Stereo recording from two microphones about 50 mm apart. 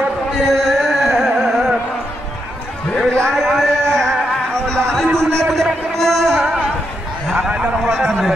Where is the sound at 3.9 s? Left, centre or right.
Centre.